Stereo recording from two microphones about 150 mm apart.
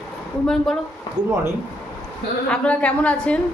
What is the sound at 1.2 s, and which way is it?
Speech, 25° right (ahead or behind).